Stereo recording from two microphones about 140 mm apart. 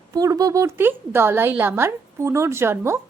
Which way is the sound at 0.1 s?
25° right (ahead or behind).